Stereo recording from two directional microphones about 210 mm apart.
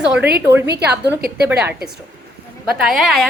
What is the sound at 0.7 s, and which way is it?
Speech, 50° right (ahead or behind).